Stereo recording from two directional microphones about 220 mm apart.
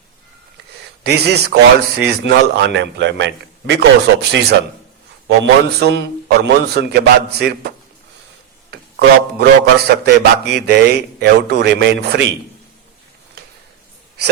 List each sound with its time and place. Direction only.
1.0 s a man's voice: 50° right (ahead or behind)
9.0 s a man's voice: 50° right (ahead or behind)